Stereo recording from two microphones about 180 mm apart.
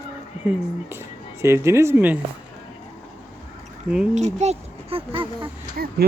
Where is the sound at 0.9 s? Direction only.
15° right (ahead or behind).